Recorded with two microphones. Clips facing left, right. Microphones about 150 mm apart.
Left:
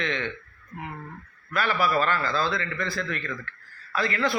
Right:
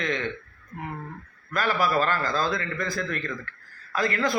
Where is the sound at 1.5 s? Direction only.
40° right (ahead or behind).